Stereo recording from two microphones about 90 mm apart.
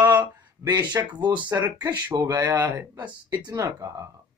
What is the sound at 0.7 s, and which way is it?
Speech, 50° right (ahead or behind).